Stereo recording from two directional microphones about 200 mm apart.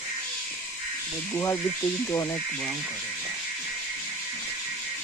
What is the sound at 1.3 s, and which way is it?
Speech, 15° left (ahead or behind).